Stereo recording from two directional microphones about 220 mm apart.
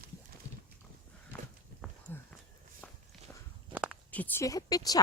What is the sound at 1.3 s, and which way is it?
Walk, 5° left (ahead or behind).